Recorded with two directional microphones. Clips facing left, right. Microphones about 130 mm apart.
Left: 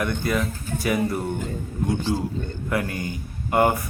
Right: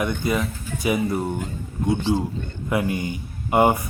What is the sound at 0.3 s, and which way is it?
Speech, centre (ahead or behind).